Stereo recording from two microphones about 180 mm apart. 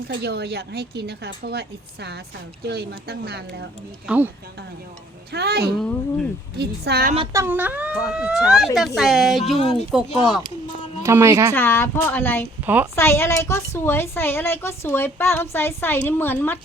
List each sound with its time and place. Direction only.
0.1 s a woman's voice: 65° right (ahead or behind)
4.0 s speech: 10° right (ahead or behind)
5.3 s a woman's voice: 60° right (ahead or behind)
5.8 s speech: 5° left (ahead or behind)
6.6 s a woman's voice: 65° right (ahead or behind)
7.3 s speech: 10° right (ahead or behind)
9.6 s speech: 35° left (ahead or behind)
11.0 s speech: 15° right (ahead or behind)
11.5 s a woman's voice: 10° left (ahead or behind)
12.6 s a woman's voice: 10° right (ahead or behind)
13.0 s a woman's voice: 15° left (ahead or behind)